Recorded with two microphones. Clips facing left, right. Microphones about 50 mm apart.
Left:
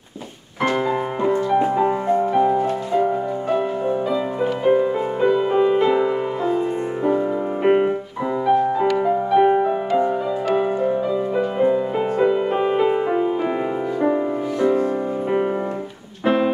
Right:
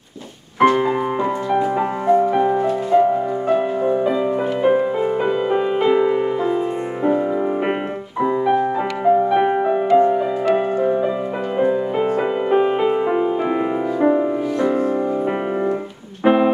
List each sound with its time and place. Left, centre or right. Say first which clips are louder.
0.6 s music: right 5 dB; centre
1.8 s music: right 2 dB; right
3.5 s music: right 3 dB; centre
4.6 s music: right 1 dB; centre
16.3 s music: right 4 dB; centre